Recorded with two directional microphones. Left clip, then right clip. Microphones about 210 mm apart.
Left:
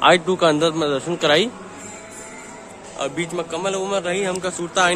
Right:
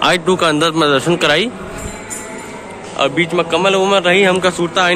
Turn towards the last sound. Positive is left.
turn(degrees=10)  # may be behind; listen again after turning